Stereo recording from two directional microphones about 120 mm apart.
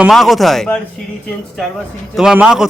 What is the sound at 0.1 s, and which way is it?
Speech, centre (ahead or behind).